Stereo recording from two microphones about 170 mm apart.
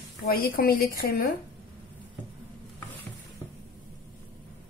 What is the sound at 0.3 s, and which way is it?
A woman's voice, 60° left (ahead or behind).